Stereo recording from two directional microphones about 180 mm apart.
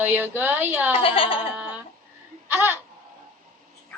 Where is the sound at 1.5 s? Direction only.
5° right (ahead or behind).